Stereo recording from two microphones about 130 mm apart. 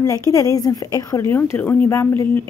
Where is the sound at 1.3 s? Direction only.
15° left (ahead or behind).